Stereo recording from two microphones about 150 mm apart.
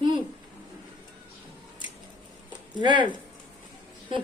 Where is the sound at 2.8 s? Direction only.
30° right (ahead or behind).